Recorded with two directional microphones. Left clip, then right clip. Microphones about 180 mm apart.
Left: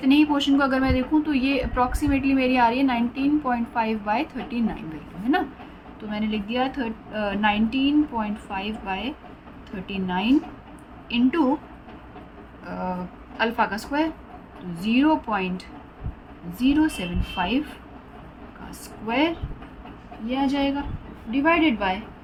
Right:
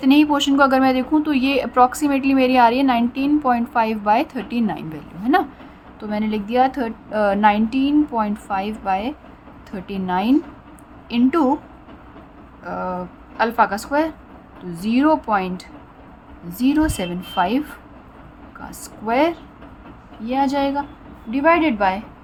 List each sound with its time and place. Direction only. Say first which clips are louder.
0.0 s a woman's voice: right 4 dB; 35° right (ahead or behind)
6.1 s a woman's voice: right 5 dB; 40° right (ahead or behind)
12.6 s a woman's voice: right 5 dB; 30° right (ahead or behind)
19.0 s a woman's voice: right 5 dB; 35° right (ahead or behind)